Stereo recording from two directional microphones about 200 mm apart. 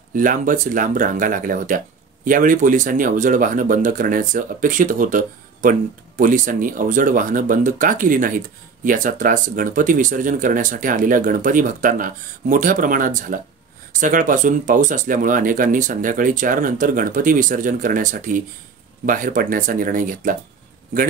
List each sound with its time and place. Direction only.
0.1 s speech: 40° right (ahead or behind)